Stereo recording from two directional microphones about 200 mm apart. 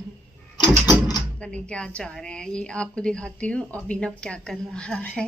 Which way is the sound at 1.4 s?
5° left (ahead or behind).